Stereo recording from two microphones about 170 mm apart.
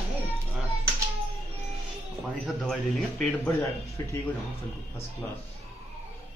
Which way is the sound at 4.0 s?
15° left (ahead or behind).